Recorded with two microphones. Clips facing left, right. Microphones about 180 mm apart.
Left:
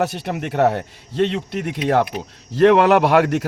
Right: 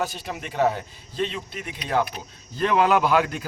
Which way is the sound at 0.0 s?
70° left (ahead or behind).